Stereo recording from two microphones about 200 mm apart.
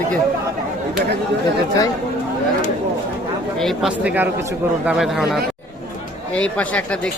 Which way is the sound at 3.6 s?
Centre (ahead or behind).